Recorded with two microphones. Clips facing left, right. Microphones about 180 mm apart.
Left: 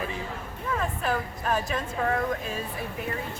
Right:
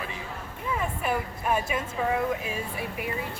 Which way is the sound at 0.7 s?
10° right (ahead or behind).